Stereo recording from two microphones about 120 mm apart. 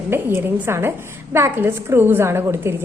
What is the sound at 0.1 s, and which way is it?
A woman's voice, 20° right (ahead or behind).